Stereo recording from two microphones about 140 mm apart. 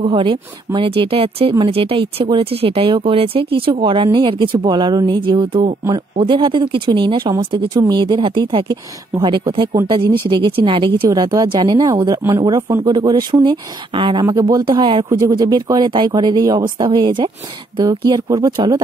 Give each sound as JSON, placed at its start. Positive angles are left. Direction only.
{"t": 0.0, "sound": "speech", "side_deg": -35}
{"t": 11.1, "sound": "speech", "side_deg": -25}
{"t": 15.0, "sound": "speech", "side_deg": -25}